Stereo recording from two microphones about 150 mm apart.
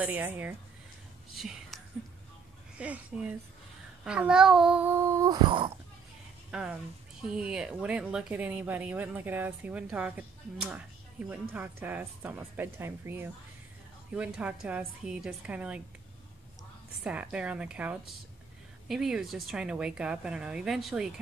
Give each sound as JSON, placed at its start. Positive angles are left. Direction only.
{"t": 0.0, "sound": "speech", "side_deg": -10}
{"t": 1.3, "sound": "speech", "side_deg": 0}
{"t": 2.8, "sound": "speech", "side_deg": -10}
{"t": 5.3, "sound": "a sound", "side_deg": -30}
{"t": 6.5, "sound": "speech", "side_deg": -5}
{"t": 17.0, "sound": "speech", "side_deg": -10}